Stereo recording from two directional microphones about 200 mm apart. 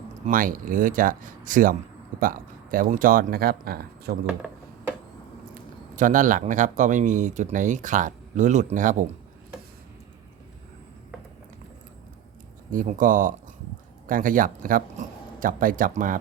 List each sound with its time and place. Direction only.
0.3 s speech: 45° right (ahead or behind)
4.3 s a sound: 5° right (ahead or behind)
6.0 s speech: 40° right (ahead or behind)
12.7 s speech: 40° right (ahead or behind)